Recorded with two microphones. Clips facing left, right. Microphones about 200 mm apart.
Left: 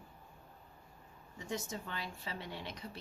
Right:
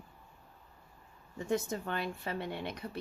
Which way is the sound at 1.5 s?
55° right (ahead or behind).